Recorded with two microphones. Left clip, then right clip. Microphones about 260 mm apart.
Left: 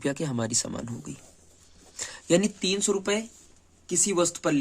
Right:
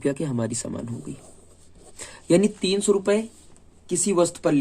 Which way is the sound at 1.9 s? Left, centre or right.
Centre.